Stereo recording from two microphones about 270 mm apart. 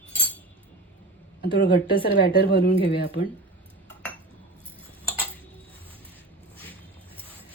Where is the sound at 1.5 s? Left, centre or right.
Left.